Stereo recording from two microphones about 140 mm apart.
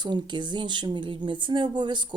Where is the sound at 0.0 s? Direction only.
35° right (ahead or behind).